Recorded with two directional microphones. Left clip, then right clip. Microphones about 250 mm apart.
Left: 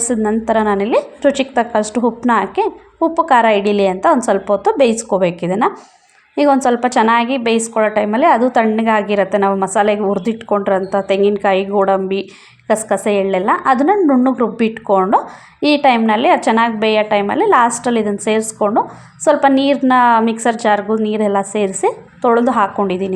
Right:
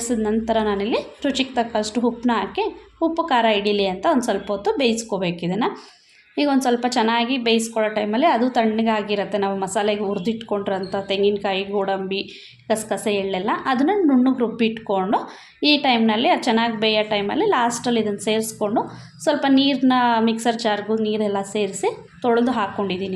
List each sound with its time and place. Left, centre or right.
0.0 s a woman's voice: left